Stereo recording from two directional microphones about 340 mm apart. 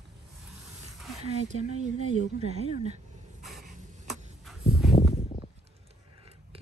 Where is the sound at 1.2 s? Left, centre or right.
Centre.